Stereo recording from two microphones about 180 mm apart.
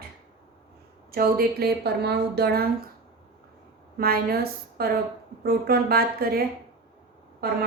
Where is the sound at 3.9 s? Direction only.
60° right (ahead or behind).